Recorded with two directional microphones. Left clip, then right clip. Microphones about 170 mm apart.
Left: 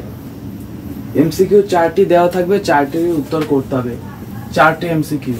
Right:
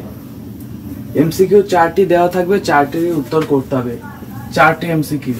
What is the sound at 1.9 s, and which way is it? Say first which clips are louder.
Speech: left 1 dB; 20° left (ahead or behind).